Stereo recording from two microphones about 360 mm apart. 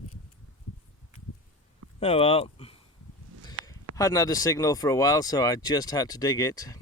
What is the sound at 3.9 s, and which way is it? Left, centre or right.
Speech, centre.